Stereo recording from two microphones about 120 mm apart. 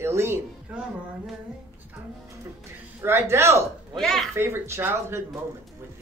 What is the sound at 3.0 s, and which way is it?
Speech, 20° right (ahead or behind).